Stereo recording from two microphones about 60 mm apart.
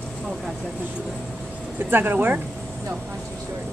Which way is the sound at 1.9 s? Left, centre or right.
Right.